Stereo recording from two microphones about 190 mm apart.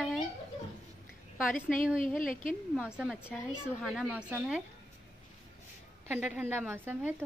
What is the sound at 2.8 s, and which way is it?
A woman's voice, 5° right (ahead or behind).